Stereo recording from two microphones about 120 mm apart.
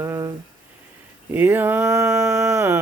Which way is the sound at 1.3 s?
15° right (ahead or behind).